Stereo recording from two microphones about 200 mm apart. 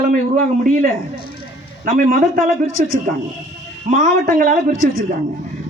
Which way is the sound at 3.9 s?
40° right (ahead or behind).